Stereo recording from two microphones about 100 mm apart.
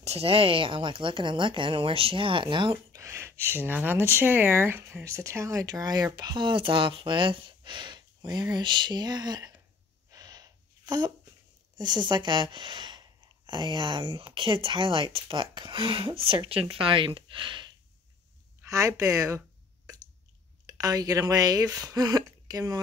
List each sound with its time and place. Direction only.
0.0 s a woman's voice: 85° right; by 2.8 s 55° right (ahead or behind)
2.9 s speech: 30° right (ahead or behind)
10.1 s a sound: 40° right (ahead or behind)
11.7 s speech: 50° right (ahead or behind)
14.0 s a woman's voice: 60° right (ahead or behind)
18.7 s speech: 30° right (ahead or behind)
20.6 s speech: 35° right (ahead or behind)